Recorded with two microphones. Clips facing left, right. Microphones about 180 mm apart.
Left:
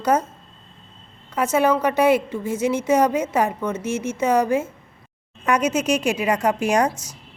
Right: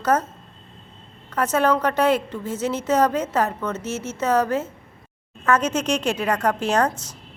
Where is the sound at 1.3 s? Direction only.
10° left (ahead or behind).